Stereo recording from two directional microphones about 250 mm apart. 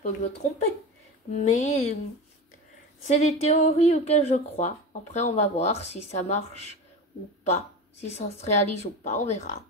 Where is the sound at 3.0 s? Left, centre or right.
Left.